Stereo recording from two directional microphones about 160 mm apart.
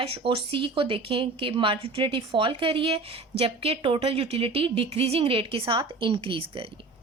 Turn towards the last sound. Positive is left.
turn(degrees=-35)  # may be behind; listen again after turning